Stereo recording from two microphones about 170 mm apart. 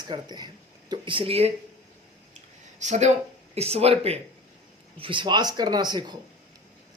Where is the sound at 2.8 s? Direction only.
45° right (ahead or behind).